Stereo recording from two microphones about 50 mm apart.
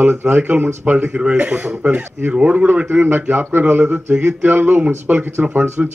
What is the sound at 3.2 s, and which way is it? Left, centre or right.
Speech, right.